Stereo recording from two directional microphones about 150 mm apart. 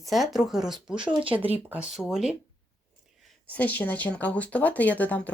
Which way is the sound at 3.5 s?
10° left (ahead or behind).